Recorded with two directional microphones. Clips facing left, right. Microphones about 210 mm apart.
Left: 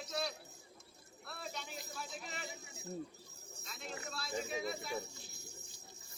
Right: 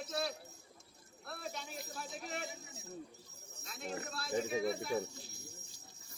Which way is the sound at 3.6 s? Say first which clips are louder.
Right 4 dB; 45° right (ahead or behind).